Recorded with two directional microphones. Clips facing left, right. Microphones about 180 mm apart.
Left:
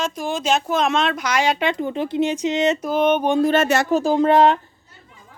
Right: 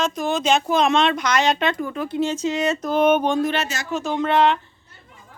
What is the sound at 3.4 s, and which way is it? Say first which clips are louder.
Speech: left 7 dB; 45° left (ahead or behind).